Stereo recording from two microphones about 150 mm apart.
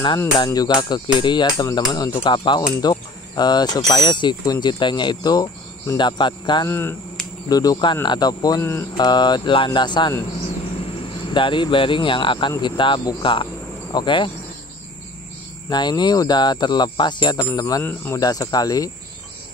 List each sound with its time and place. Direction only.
0.4 s speech: 25° left (ahead or behind)
6.7 s speech: 15° left (ahead or behind)
8.9 s speech: 30° left (ahead or behind)
11.3 s speech: 30° left (ahead or behind)
15.7 s speech: 30° left (ahead or behind)